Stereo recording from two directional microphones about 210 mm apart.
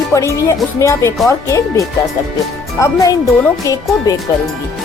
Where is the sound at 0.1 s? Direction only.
15° left (ahead or behind).